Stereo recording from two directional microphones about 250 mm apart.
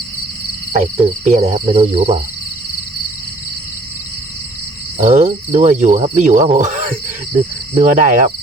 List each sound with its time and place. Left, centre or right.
0.7 s speech: right
4.9 s speech: right
6.6 s a sound: right
7.3 s speech: right